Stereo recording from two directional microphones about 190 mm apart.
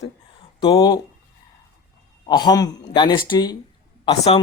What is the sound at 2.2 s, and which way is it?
Speech, 20° left (ahead or behind).